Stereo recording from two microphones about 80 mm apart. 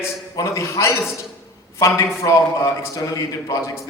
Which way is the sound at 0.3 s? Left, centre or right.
Left.